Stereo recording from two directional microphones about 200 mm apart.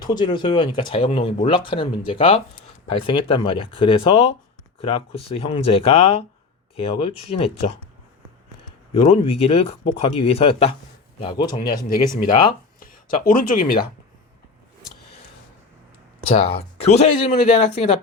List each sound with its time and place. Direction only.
0.0 s speech: 20° left (ahead or behind)
8.9 s speech: 30° left (ahead or behind)
11.9 s speech: 45° left (ahead or behind)
12.3 s speech: 25° left (ahead or behind)
12.8 s speech: 45° left (ahead or behind)
16.5 s speech: 30° left (ahead or behind)